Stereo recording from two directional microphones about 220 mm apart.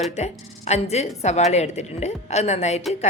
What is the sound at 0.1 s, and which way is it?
A woman's voice, 30° left (ahead or behind).